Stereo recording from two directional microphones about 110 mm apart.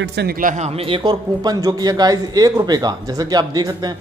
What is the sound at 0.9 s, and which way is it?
A man's voice, 40° right (ahead or behind).